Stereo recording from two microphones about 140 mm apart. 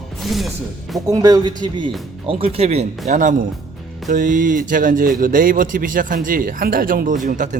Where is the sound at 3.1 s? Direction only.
65° right (ahead or behind); by 7.2 s 80° right.